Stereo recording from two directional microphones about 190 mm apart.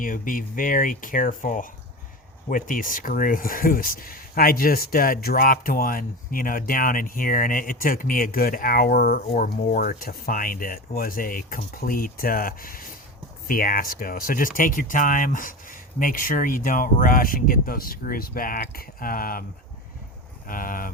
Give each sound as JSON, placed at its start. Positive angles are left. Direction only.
{"t": 0.0, "sound": "speech", "side_deg": 45}
{"t": 20.5, "sound": "speech", "side_deg": 50}